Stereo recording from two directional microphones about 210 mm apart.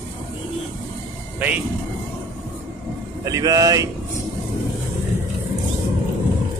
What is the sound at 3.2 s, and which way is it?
Speech, 15° right (ahead or behind).